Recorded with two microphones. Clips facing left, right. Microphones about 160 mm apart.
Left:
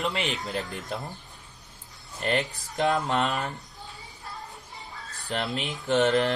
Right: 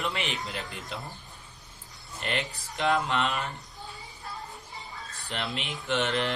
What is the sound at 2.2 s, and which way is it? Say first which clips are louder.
Speech: left 5 dB; 40° left (ahead or behind).